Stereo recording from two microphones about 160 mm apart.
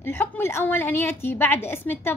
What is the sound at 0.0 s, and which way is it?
A woman's voice, 15° left (ahead or behind).